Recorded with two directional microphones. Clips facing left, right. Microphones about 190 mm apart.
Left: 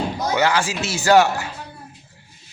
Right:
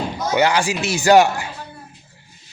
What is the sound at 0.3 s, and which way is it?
Speech, 15° right (ahead or behind).